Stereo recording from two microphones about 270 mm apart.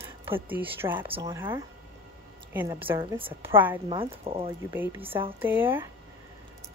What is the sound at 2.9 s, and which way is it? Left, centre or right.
Speech, centre.